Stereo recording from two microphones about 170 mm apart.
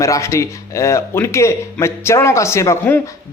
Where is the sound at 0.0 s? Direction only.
20° left (ahead or behind).